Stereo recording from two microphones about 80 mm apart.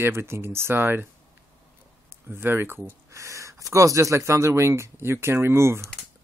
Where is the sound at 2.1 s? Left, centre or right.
Right.